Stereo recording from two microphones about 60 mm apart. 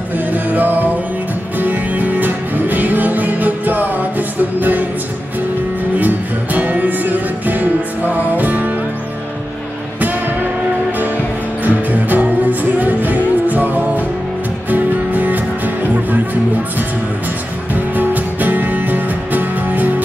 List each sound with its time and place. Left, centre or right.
0.3 s music: right
5.9 s music: right
11.6 s music: right
17.7 s music: right